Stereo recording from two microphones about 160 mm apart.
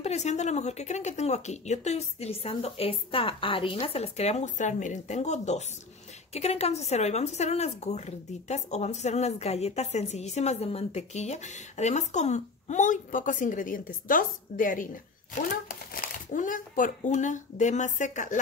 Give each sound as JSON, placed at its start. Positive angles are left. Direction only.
{"t": 0.0, "sound": "a woman's voice", "side_deg": 45}